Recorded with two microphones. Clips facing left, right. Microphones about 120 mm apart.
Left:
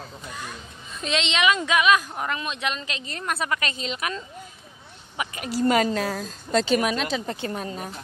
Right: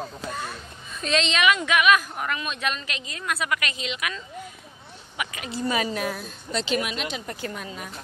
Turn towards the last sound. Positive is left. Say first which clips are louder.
# left 4 dB
turn(degrees=40)  # may be behind; listen again after turning